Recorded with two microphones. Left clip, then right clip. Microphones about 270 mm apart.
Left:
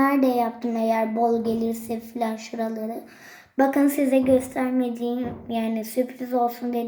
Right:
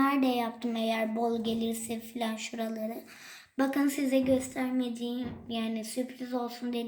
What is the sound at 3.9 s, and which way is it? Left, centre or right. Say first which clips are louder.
Speech: left 8 dB; centre.